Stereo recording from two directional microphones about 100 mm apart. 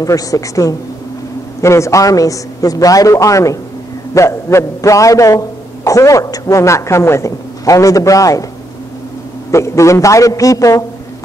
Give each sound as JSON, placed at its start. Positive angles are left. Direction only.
{"t": 0.0, "sound": "a woman's voice", "side_deg": 35}
{"t": 9.5, "sound": "a woman's voice", "side_deg": 30}